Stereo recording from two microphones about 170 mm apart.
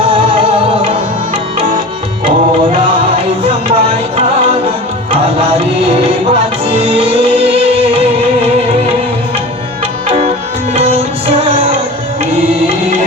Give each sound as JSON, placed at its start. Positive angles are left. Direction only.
{"t": 0.0, "sound": "music", "side_deg": -30}
{"t": 3.4, "sound": "music", "side_deg": -35}
{"t": 5.1, "sound": "music", "side_deg": -30}
{"t": 10.8, "sound": "music", "side_deg": -35}